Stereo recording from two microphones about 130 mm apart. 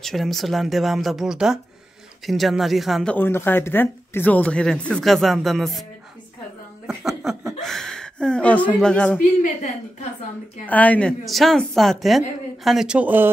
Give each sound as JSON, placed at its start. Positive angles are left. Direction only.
{"t": 0.0, "sound": "speech", "side_deg": 0}
{"t": 3.2, "sound": "speech", "side_deg": 15}
{"t": 6.9, "sound": "a sound", "side_deg": -5}
{"t": 10.7, "sound": "speech", "side_deg": 10}